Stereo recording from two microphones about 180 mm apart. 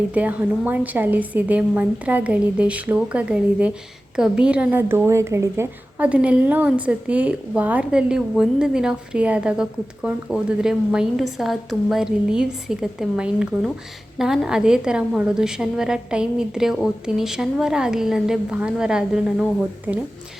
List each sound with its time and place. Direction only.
0.1 s a woman's voice: 10° right (ahead or behind)